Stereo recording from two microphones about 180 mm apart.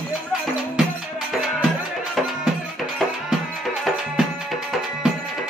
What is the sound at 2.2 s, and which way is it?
Music, centre (ahead or behind).